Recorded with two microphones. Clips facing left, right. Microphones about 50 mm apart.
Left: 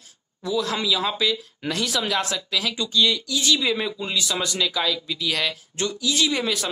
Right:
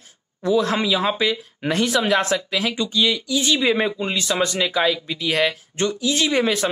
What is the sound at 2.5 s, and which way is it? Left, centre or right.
Speech, right.